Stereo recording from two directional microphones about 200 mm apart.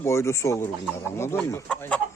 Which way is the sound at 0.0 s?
15° left (ahead or behind).